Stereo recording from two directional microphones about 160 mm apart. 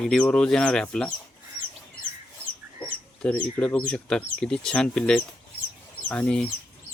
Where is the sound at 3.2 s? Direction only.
5° left (ahead or behind).